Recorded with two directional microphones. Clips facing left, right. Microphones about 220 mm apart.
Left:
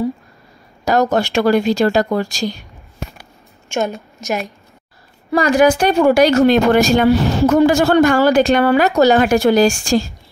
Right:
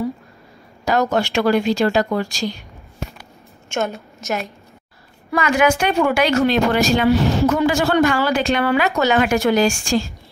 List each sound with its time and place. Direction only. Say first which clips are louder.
1.1 s speech: left 3 dB; 40° left (ahead or behind)
3.7 s a woman's voice: left 3 dB; 15° left (ahead or behind)
5.3 s speech: left 5 dB; 35° left (ahead or behind)